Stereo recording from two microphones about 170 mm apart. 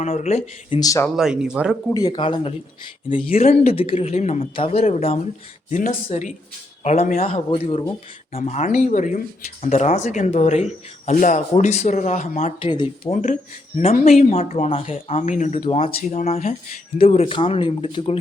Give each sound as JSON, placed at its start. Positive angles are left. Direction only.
{"t": 0.0, "sound": "speech", "side_deg": 40}
{"t": 0.8, "sound": "speech", "side_deg": 20}
{"t": 1.1, "sound": "speech", "side_deg": -5}
{"t": 1.9, "sound": "speech", "side_deg": 20}
{"t": 12.5, "sound": "speech", "side_deg": 30}
{"t": 13.7, "sound": "speech", "side_deg": 40}